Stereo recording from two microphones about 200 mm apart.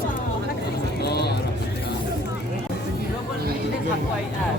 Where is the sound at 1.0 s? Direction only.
55° left (ahead or behind).